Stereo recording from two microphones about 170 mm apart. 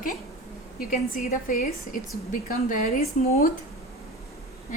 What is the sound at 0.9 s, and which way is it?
A woman's voice, 55° left (ahead or behind).